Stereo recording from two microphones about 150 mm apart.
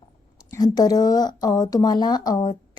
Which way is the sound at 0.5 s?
25° left (ahead or behind).